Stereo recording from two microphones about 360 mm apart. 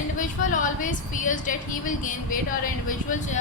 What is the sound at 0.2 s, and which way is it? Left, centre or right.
A woman's voice, left.